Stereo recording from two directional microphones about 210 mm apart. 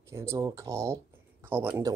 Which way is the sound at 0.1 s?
15° right (ahead or behind).